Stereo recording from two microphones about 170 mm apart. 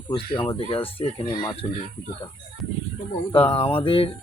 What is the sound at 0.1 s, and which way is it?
Speech, 30° left (ahead or behind).